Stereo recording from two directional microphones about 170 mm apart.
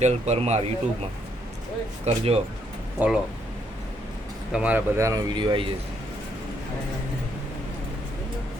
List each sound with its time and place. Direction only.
0.0 s speech: 40° right (ahead or behind)
2.0 s speech: 35° right (ahead or behind)
3.0 s speech: 10° right (ahead or behind)
4.5 s speech: 10° right (ahead or behind); by 5.6 s 25° right (ahead or behind)